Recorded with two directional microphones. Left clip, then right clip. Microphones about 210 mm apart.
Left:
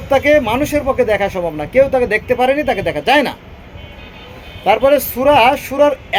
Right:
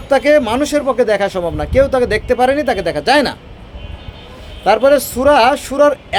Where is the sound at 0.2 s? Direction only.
10° right (ahead or behind).